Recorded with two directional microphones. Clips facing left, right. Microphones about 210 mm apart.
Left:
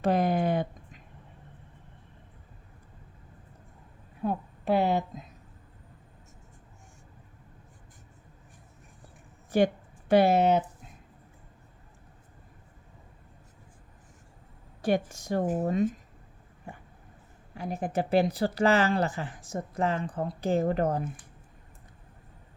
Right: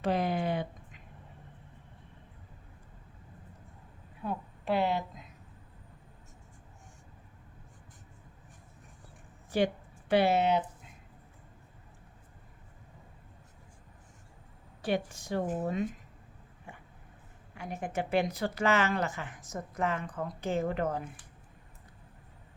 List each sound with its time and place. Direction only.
0.0 s speech: 45° left (ahead or behind)
4.2 s a woman's voice: 45° left (ahead or behind)
9.5 s a woman's voice: 45° left (ahead or behind)
14.8 s a woman's voice: 45° left (ahead or behind)
16.7 s a sound: 40° left (ahead or behind)
17.5 s speech: 35° left (ahead or behind)